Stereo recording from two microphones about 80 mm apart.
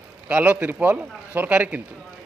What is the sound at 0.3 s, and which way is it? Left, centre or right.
Speech, centre.